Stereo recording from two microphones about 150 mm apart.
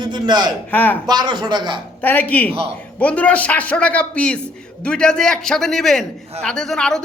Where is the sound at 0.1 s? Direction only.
30° right (ahead or behind).